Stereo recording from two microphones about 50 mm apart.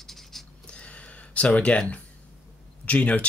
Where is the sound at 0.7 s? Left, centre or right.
Left.